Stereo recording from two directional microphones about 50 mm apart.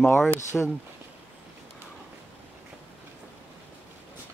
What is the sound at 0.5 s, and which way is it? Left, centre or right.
Speech, centre.